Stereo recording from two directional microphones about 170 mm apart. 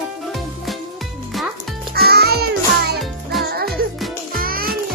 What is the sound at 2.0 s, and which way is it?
Music, 70° right (ahead or behind).